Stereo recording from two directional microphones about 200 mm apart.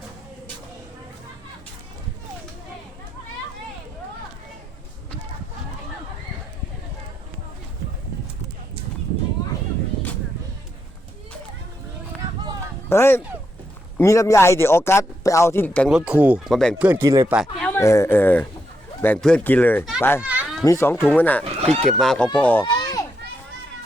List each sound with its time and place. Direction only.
12.9 s a man's voice: 10° left (ahead or behind)
16.0 s speech: 5° right (ahead or behind)
17.3 s speech: centre (ahead or behind)
17.7 s a man's voice: 15° left (ahead or behind)
20.2 s children playing: 5° right (ahead or behind)
20.7 s a man's voice: 10° left (ahead or behind)
22.6 s children playing: 20° left (ahead or behind)